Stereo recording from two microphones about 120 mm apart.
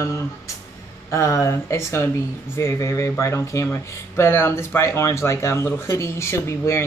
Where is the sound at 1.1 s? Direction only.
25° left (ahead or behind).